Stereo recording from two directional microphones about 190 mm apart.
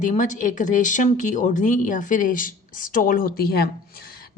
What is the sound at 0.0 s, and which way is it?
Speech, 40° left (ahead or behind).